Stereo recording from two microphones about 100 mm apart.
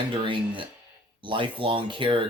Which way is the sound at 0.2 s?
55° right (ahead or behind).